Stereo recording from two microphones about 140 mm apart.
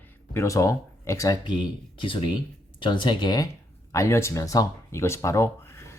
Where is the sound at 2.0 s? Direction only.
40° left (ahead or behind).